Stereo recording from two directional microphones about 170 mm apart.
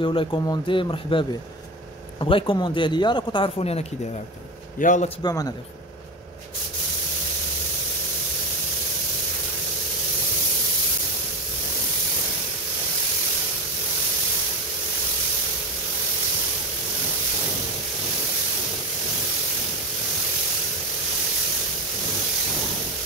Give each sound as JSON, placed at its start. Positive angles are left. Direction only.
{"t": 0.0, "sound": "speech", "side_deg": 30}
{"t": 4.7, "sound": "a man's voice", "side_deg": 50}
{"t": 5.2, "sound": "speech", "side_deg": 20}